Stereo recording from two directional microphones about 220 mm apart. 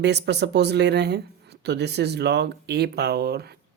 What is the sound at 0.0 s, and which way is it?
Speech, 50° right (ahead or behind).